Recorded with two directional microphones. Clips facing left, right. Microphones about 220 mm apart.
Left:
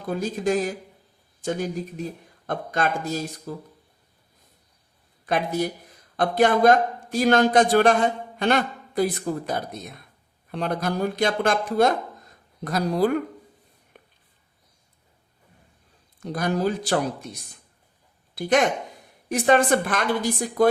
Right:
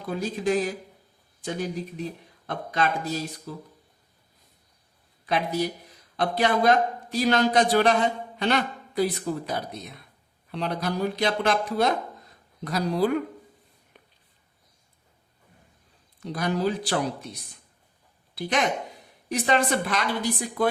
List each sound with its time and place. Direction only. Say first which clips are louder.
0.1 s a man's voice: left 2 dB; 45° left (ahead or behind)
5.2 s a man's voice: left 2 dB; 50° left (ahead or behind)
13.9 s a sound: left 4 dB; 50° left (ahead or behind)
16.2 s a man's voice: left 2 dB; 45° left (ahead or behind)
18.3 s a man's voice: left 5 dB; 45° left (ahead or behind)